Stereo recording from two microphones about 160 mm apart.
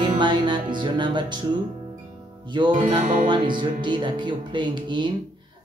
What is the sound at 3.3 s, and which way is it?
Speech, 30° right (ahead or behind).